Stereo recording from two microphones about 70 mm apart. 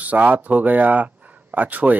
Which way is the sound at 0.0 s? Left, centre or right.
Right.